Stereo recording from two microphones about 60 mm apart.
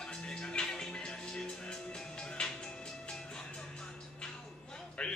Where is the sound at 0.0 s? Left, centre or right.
Centre.